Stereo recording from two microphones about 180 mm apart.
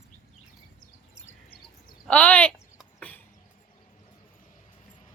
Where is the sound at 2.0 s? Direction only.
5° left (ahead or behind).